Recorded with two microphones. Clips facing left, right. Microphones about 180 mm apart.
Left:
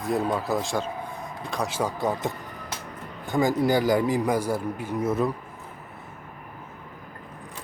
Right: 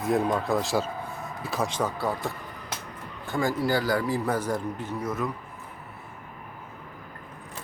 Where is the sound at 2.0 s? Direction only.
20° left (ahead or behind).